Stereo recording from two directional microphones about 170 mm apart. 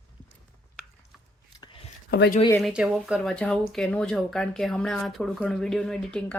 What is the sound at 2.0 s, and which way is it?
Speech, 85° left.